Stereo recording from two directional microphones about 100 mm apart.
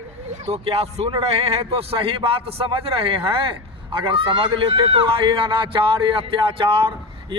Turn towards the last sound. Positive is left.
turn(degrees=-55)  # may be behind; listen again after turning